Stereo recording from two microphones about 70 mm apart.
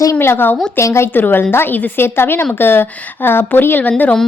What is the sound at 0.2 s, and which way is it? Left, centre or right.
A woman's voice, left.